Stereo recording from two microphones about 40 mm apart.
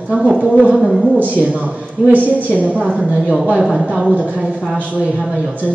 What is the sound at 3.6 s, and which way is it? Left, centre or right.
Speech, centre.